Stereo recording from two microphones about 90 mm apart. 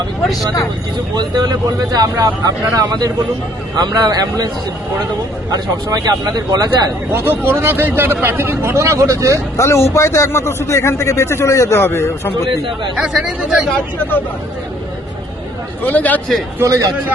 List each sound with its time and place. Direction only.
1.1 s speech: 50° right (ahead or behind)
5.5 s speech: 45° right (ahead or behind)
7.1 s speech: 25° right (ahead or behind)
9.6 s speech: 35° left (ahead or behind)
13.0 s speech: 5° right (ahead or behind)
15.8 s speech: 20° left (ahead or behind)
16.6 s a man's voice: 40° right (ahead or behind)